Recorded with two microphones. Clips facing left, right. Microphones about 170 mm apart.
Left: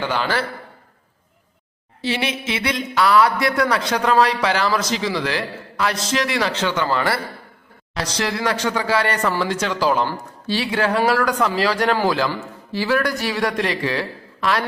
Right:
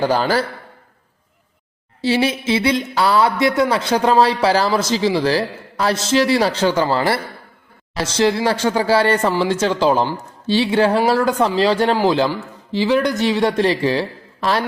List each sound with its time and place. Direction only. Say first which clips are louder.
0.0 s speech: right 5 dB; 40° right (ahead or behind)
2.0 s speech: right 6 dB; 30° right (ahead or behind)